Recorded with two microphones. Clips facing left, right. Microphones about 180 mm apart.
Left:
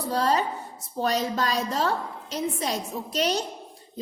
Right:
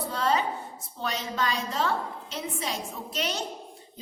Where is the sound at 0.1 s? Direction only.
40° left (ahead or behind).